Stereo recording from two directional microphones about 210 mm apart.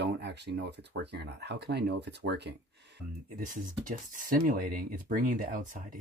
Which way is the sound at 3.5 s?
40° right (ahead or behind).